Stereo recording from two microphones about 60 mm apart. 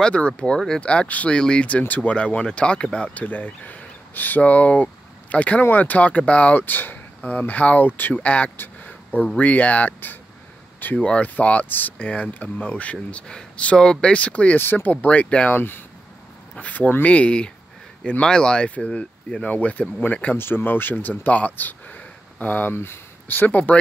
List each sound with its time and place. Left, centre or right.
0.0 s speech: centre
8.5 s a sound: left
9.4 s speech: left
15.5 s speech: left
16.5 s a sound: left
17.0 s speech: left
20.3 s speech: left